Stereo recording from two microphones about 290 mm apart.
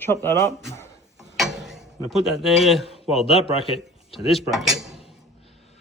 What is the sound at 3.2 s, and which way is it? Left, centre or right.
Speech, centre.